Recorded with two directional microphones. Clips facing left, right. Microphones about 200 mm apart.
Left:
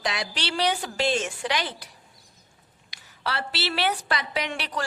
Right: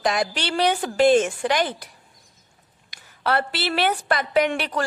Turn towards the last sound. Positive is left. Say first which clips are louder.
# right 9 dB
turn(degrees=-50)  # may be behind; listen again after turning